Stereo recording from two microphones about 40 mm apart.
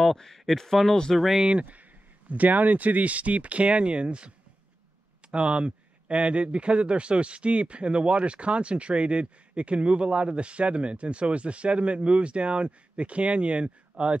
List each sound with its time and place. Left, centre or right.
0.0 s speech: centre
1.1 s speech: centre
1.4 s speech: right
2.2 s speech: right
5.3 s speech: right